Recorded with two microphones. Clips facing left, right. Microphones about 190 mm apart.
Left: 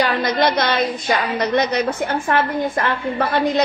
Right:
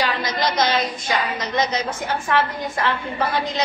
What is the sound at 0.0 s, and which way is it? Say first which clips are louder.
A woman's voice: left 5 dB; 60° left (ahead or behind).